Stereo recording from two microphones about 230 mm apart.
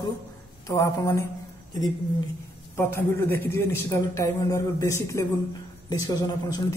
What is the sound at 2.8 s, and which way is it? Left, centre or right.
A man's voice, centre.